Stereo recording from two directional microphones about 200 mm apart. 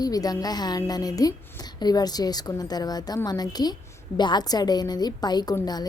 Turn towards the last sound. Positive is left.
turn(degrees=20)  # may be behind; listen again after turning